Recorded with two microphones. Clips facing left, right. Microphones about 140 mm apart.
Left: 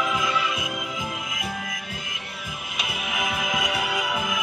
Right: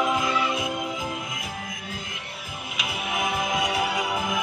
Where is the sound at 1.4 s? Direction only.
90° left.